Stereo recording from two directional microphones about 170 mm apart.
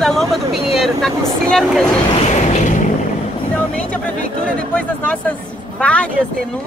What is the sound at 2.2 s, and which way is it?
Vehicle, 40° left (ahead or behind).